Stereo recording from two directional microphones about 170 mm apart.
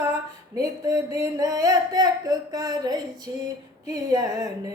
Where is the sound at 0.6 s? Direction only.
15° right (ahead or behind).